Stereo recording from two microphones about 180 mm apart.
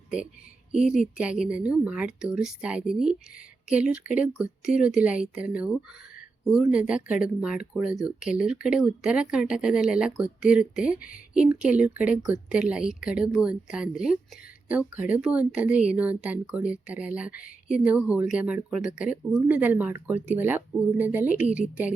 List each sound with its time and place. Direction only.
0.7 s a woman's voice: 5° right (ahead or behind)